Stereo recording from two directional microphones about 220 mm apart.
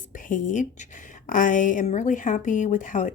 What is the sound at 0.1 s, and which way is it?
A woman's voice, 35° left (ahead or behind).